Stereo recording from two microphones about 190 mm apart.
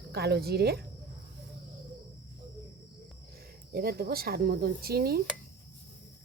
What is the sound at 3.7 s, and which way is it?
Speech, 55° right (ahead or behind).